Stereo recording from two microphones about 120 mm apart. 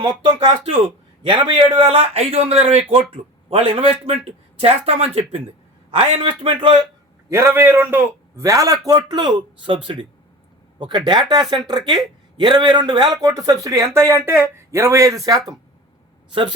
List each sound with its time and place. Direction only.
0.0 s a man's voice: 45° right (ahead or behind)
7.3 s a man's voice: 20° right (ahead or behind)
16.3 s a man's voice: 45° right (ahead or behind)